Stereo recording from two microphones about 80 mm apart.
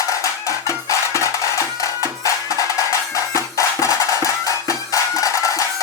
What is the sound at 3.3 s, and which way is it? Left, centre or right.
Music, left.